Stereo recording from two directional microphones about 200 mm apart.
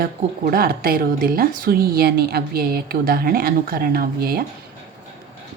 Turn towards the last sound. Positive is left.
turn(degrees=-50)  # may be behind; listen again after turning